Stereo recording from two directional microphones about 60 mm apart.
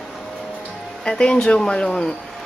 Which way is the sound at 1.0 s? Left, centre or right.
Centre.